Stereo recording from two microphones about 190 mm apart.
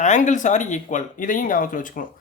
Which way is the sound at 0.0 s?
40° left (ahead or behind).